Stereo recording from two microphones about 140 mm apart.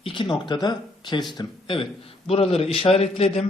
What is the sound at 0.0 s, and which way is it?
A man's voice, 35° left (ahead or behind).